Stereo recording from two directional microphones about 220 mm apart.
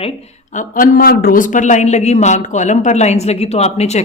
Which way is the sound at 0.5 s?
40° left (ahead or behind).